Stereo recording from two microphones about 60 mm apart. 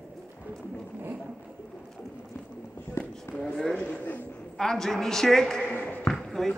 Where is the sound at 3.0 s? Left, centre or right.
Left.